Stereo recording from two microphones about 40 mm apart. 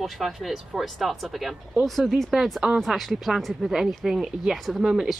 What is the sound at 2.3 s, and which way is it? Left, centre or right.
Speech, centre.